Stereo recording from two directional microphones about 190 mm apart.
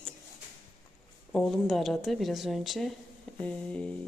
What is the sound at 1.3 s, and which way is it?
Speech, centre (ahead or behind).